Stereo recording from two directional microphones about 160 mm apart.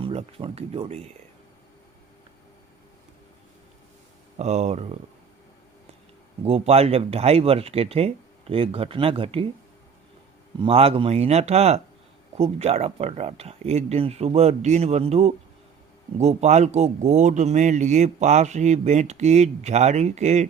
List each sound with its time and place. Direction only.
0.0 s speech: 35° right (ahead or behind)
4.4 s speech: 45° right (ahead or behind)
6.4 s speech: 40° right (ahead or behind)
10.6 s speech: 35° right (ahead or behind)